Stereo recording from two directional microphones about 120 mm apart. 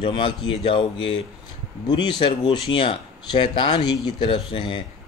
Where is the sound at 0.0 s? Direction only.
45° left (ahead or behind).